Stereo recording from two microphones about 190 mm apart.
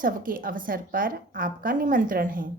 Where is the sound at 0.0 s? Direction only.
45° right (ahead or behind).